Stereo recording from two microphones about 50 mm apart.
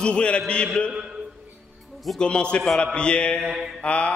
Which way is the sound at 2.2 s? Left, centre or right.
Centre.